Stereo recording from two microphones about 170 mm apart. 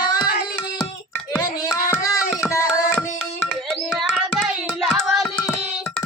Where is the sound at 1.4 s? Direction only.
20° left (ahead or behind).